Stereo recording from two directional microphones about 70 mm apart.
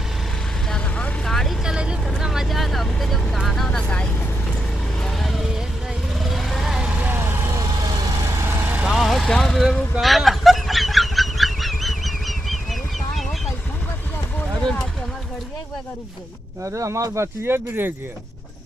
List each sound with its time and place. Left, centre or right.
1.2 s vehicle: centre
1.6 s vehicle: centre
3.4 s speech: centre
4.9 s vehicle: centre
7.1 s vehicle: right
7.6 s vehicle: right
8.9 s vehicle: centre
9.6 s speech: centre
10.0 s a sound: centre
16.6 s speech: right